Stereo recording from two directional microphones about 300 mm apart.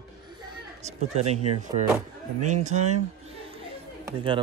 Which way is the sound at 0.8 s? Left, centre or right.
Right.